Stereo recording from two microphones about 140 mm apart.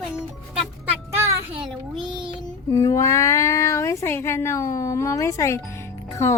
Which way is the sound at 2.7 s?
25° left (ahead or behind).